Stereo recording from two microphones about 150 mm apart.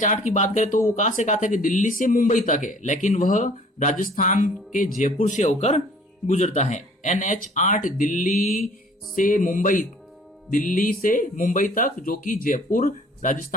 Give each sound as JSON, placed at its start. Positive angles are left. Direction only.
{"t": 0.0, "sound": "speech", "side_deg": 55}